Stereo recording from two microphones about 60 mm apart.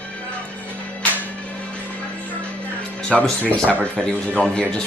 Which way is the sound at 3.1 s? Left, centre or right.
Centre.